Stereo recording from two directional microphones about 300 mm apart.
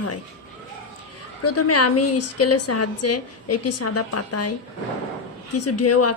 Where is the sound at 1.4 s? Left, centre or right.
Left.